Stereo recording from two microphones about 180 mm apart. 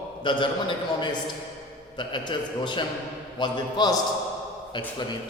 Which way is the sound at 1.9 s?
25° left (ahead or behind).